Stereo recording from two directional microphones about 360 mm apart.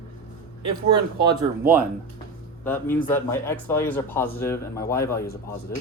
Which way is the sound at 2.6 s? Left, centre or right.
Centre.